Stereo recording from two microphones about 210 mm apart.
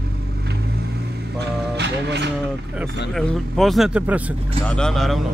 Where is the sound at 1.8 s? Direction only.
55° right (ahead or behind).